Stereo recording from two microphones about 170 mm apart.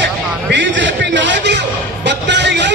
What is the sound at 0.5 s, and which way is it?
A man's voice, 90° right.